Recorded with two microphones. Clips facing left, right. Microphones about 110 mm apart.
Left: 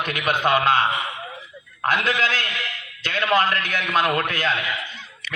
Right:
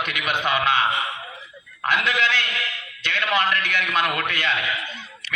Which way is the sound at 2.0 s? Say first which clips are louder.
Even; 35° left (ahead or behind).